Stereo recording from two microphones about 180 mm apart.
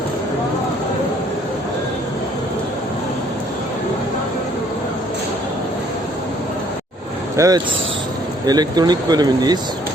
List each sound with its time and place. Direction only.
7.3 s speech: 20° right (ahead or behind)